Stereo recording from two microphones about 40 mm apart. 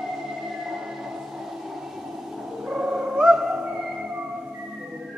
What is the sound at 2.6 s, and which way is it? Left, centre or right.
Cat, centre.